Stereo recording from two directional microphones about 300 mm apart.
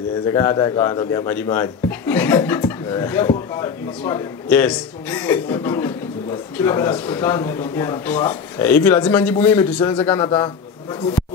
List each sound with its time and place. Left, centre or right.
0.3 s a man's voice: centre